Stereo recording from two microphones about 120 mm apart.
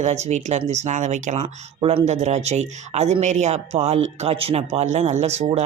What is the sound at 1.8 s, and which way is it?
Speech, 55° right (ahead or behind).